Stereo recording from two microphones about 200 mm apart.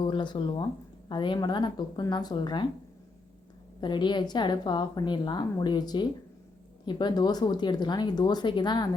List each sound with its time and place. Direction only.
0.0 s a woman's voice: 25° left (ahead or behind)
3.8 s a woman's voice: 25° left (ahead or behind)